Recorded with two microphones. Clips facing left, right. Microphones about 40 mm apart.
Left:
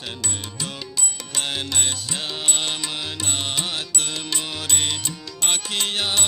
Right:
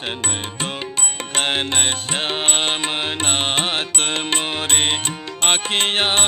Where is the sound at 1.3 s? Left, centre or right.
Right.